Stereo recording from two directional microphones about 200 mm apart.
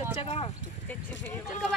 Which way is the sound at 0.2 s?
30° left (ahead or behind).